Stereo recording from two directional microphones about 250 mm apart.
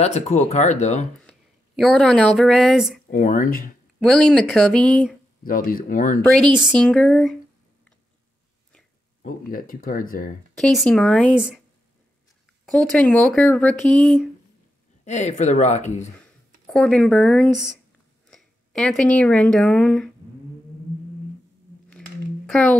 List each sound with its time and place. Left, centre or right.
0.0 s speech: left
1.8 s speech: centre
3.1 s speech: left
4.0 s speech: centre
5.4 s speech: left
6.3 s speech: centre
9.2 s speech: left
10.5 s speech: centre
12.6 s speech: centre
15.0 s speech: left
16.6 s speech: centre
22.5 s a child's voice: centre